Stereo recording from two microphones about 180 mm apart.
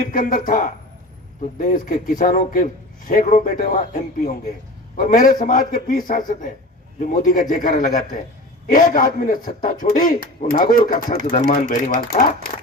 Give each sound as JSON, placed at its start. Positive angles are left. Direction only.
{"t": 0.0, "sound": "a man's voice", "side_deg": 50}